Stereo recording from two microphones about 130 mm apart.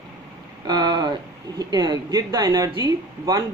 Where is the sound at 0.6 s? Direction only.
30° right (ahead or behind).